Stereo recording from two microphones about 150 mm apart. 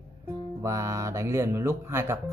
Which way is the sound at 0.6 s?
20° right (ahead or behind).